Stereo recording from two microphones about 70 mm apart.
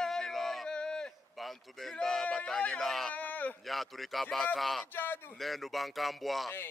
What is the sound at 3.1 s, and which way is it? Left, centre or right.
Speech, left.